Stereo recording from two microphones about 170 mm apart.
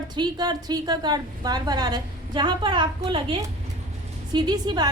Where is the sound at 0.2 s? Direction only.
25° right (ahead or behind).